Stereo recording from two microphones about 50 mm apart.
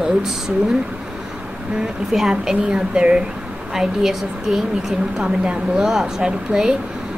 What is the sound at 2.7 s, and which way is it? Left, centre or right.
Speech, centre.